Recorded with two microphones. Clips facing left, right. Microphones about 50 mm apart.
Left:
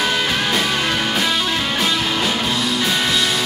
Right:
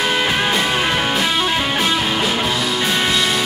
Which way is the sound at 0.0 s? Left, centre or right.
Centre.